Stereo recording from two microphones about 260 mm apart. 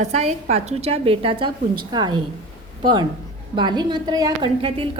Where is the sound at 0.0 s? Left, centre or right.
Right.